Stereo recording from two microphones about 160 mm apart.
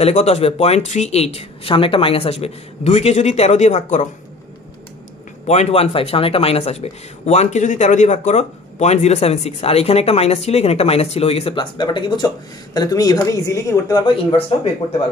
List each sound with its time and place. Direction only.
0.0 s speech: 45° left (ahead or behind)
5.5 s speech: 40° left (ahead or behind)